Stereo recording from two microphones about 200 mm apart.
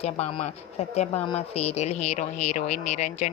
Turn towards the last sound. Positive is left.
turn(degrees=35)  # may be behind; listen again after turning